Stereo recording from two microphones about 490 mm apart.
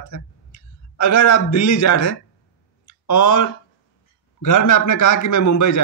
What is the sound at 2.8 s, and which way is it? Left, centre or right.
Clicking, left.